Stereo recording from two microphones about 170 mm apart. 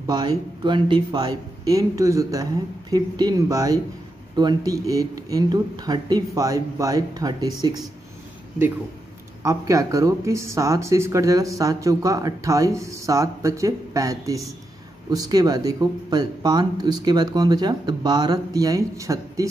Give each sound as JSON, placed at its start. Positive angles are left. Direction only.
{"t": 0.0, "sound": "speech", "side_deg": -25}
{"t": 9.4, "sound": "speech", "side_deg": -20}